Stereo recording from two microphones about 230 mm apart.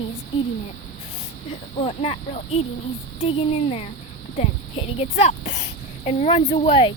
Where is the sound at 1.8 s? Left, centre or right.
Left.